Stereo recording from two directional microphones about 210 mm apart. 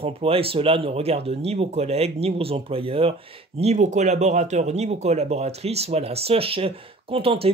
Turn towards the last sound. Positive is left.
turn(degrees=-25)  # may be behind; listen again after turning